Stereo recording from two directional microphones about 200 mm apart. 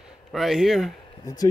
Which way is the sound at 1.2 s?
20° left (ahead or behind).